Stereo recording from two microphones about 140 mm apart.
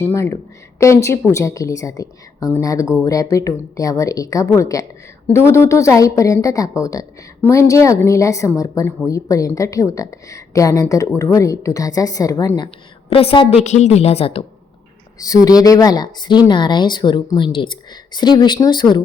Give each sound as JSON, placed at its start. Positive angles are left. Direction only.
{"t": 0.0, "sound": "a woman's voice", "side_deg": 20}
{"t": 13.1, "sound": "a woman's voice", "side_deg": 45}
{"t": 15.2, "sound": "a woman's voice", "side_deg": 25}